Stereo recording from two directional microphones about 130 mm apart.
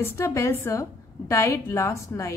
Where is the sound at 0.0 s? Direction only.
20° left (ahead or behind).